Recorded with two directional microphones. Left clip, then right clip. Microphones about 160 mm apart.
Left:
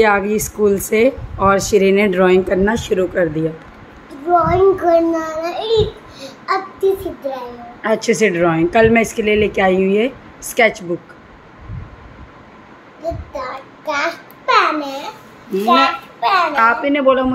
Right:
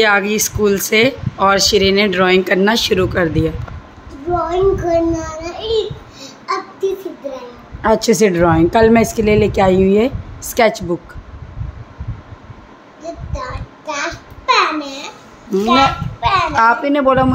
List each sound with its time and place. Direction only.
0.0 s speech: 5° left (ahead or behind)
2.7 s speech: 15° right (ahead or behind)
4.5 s child singing: 5° left (ahead or behind)
7.8 s a woman's voice: 25° right (ahead or behind)
13.0 s child singing: 10° left (ahead or behind)
15.6 s speech: 5° left (ahead or behind)
16.5 s a woman's voice: 20° right (ahead or behind)